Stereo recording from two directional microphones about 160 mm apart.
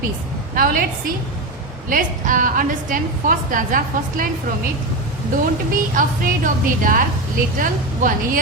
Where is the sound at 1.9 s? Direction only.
55° right (ahead or behind).